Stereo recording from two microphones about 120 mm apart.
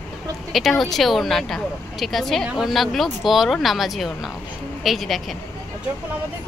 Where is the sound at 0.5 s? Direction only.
Centre (ahead or behind).